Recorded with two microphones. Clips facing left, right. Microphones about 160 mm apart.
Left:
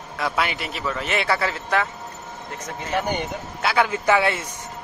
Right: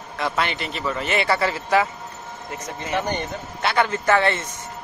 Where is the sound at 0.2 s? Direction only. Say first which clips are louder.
Even; 5° left (ahead or behind).